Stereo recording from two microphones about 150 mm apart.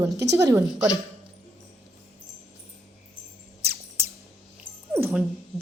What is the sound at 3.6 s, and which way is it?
Music, 90° right.